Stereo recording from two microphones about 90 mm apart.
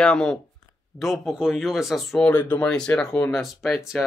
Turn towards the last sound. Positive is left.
turn(degrees=0)  # may be behind; listen again after turning